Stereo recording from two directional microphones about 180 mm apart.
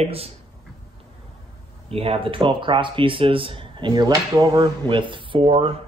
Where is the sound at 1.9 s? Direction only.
30° right (ahead or behind).